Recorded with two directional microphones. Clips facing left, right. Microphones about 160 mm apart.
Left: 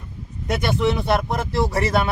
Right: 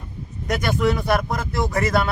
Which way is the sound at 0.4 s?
25° left (ahead or behind).